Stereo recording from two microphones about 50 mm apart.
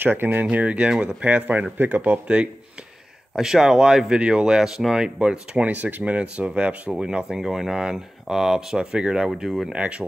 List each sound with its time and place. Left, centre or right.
0.0 s speech: right
0.5 s speech: right
3.3 s speech: centre; by 6.9 s right
6.9 s speech: centre
9.4 s speech: centre
9.7 s speech: right